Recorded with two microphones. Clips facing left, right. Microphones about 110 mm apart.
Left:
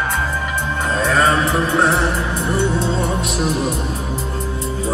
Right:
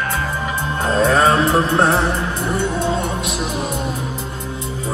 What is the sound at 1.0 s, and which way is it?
Mantra, 5° right (ahead or behind).